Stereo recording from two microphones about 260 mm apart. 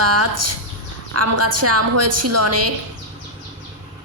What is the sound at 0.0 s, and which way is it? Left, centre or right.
A woman's voice, right.